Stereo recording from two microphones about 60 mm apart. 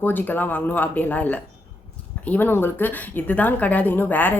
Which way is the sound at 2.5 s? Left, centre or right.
Left.